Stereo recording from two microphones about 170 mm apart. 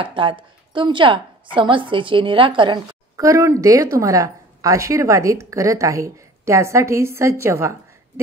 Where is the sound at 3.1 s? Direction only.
20° right (ahead or behind).